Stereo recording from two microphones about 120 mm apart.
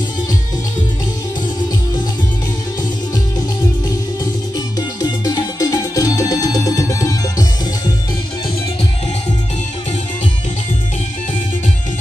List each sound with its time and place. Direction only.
4.7 s music: 35° left (ahead or behind)